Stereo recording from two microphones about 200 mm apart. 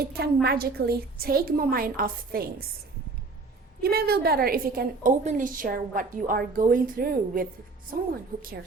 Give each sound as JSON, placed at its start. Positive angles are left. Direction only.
{"t": 0.0, "sound": "a woman's voice", "side_deg": -50}
{"t": 3.8, "sound": "a woman's voice", "side_deg": -50}